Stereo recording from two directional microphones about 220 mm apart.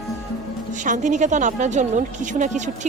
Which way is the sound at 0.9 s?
35° right (ahead or behind).